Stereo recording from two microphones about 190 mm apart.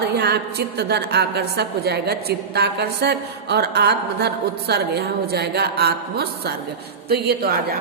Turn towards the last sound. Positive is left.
turn(degrees=-55)  # may be behind; listen again after turning